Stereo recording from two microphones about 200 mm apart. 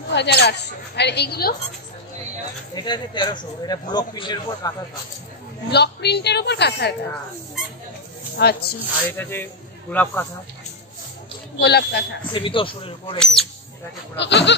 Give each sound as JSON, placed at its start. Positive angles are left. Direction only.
{"t": 0.1, "sound": "a woman's voice", "side_deg": 55}
{"t": 2.7, "sound": "speech", "side_deg": 20}
{"t": 5.7, "sound": "a woman's voice", "side_deg": 55}
{"t": 8.4, "sound": "speech", "side_deg": 50}
{"t": 9.1, "sound": "a man's voice", "side_deg": 10}
{"t": 11.5, "sound": "a woman's voice", "side_deg": 55}
{"t": 12.3, "sound": "speech", "side_deg": 25}
{"t": 13.2, "sound": "speech", "side_deg": 0}
{"t": 14.1, "sound": "a woman's voice", "side_deg": 60}